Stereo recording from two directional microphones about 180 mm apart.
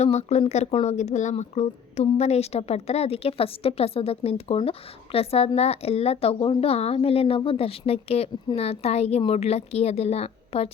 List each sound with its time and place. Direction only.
0.0 s speech: 40° left (ahead or behind)